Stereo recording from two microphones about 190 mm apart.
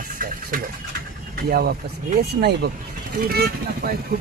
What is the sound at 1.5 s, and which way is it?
Speech, 55° right (ahead or behind).